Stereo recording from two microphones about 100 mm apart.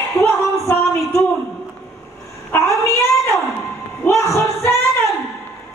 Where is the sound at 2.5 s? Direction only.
30° left (ahead or behind).